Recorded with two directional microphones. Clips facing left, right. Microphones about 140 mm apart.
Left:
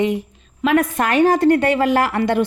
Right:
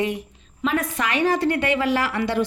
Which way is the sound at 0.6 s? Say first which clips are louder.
Left 7 dB; 60° left (ahead or behind).